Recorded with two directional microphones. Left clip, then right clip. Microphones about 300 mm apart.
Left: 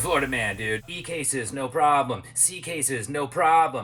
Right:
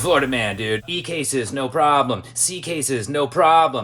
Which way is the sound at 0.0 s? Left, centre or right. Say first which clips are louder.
Right 6 dB; centre.